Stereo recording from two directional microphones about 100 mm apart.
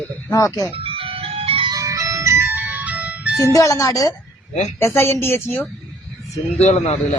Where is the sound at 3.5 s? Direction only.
35° left (ahead or behind).